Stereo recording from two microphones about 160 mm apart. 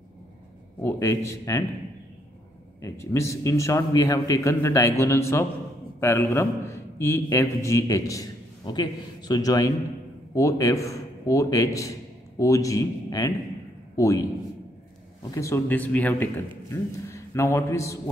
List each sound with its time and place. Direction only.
0.8 s a man's voice: 20° left (ahead or behind)
2.8 s a man's voice: 15° left (ahead or behind)
15.3 s a man's voice: 20° left (ahead or behind)